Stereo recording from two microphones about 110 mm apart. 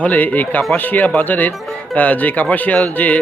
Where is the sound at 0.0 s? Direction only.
15° left (ahead or behind).